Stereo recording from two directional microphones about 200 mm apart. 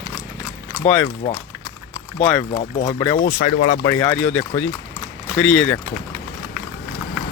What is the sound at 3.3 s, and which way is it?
Speech, 40° left (ahead or behind).